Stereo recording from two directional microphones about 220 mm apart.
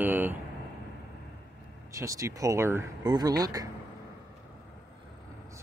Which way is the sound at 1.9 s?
15° right (ahead or behind).